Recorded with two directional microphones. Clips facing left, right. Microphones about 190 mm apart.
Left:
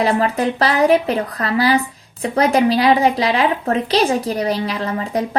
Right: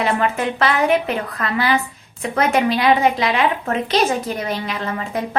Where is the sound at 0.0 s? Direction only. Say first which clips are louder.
Left 3 dB; 35° left (ahead or behind).